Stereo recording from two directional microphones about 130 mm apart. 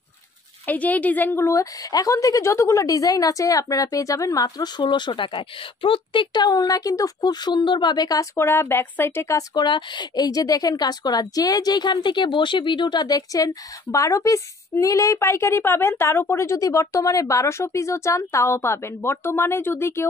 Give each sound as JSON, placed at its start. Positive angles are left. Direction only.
{"t": 0.7, "sound": "a woman's voice", "side_deg": 10}